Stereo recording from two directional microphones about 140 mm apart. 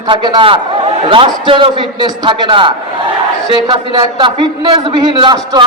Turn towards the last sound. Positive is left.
turn(degrees=-30)  # may be behind; listen again after turning